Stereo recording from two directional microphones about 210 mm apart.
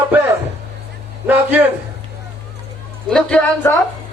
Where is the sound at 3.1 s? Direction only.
5° left (ahead or behind).